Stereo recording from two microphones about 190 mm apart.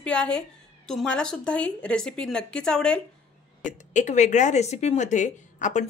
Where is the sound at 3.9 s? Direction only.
40° left (ahead or behind).